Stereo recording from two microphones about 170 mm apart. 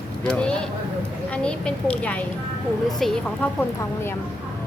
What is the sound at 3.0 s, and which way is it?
Speech, centre (ahead or behind).